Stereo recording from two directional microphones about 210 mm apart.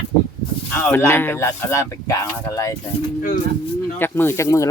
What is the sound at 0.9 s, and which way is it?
Speech, 10° left (ahead or behind).